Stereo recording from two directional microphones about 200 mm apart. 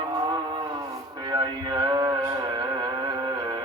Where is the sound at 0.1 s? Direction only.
20° right (ahead or behind).